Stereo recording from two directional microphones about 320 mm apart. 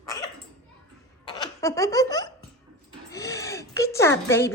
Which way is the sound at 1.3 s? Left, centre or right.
Centre.